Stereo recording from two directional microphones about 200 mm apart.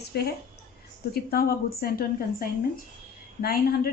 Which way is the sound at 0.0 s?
55° left (ahead or behind).